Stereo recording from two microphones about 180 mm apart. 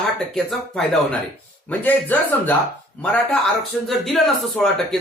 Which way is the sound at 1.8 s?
10° left (ahead or behind).